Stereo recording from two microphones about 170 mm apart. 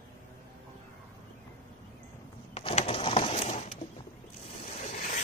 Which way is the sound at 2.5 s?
35° left (ahead or behind).